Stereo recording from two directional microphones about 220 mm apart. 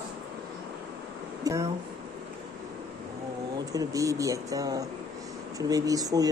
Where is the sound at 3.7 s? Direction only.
15° right (ahead or behind).